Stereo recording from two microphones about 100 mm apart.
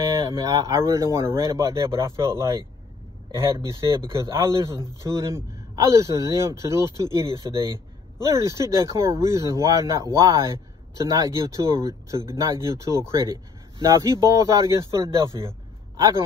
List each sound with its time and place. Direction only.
0.0 s a man's voice: 35° right (ahead or behind)
4.1 s a man's voice: 30° right (ahead or behind)